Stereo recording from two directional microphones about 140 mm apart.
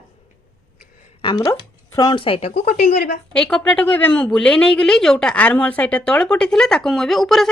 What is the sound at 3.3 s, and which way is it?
A woman's voice, 5° left (ahead or behind).